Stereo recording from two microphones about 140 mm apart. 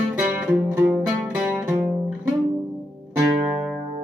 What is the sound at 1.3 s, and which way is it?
Music, 10° right (ahead or behind).